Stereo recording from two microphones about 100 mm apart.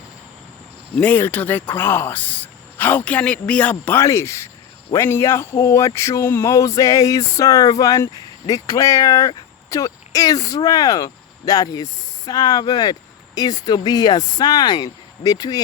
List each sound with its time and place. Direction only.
0.9 s speech: 15° left (ahead or behind)
4.0 s speech: 30° left (ahead or behind)